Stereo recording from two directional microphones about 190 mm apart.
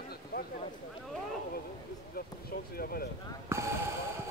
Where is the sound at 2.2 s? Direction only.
50° left (ahead or behind).